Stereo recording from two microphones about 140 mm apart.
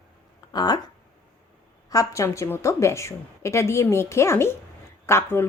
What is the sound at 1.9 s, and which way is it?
A woman's voice, 25° left (ahead or behind).